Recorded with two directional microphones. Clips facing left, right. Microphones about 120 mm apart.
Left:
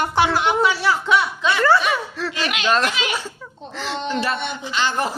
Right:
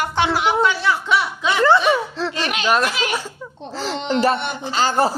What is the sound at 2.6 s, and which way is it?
Speech, 5° right (ahead or behind).